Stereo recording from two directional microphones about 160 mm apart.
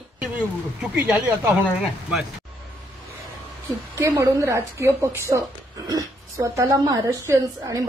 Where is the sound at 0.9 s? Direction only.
10° right (ahead or behind).